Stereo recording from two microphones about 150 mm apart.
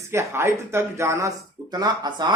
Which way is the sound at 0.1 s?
15° right (ahead or behind).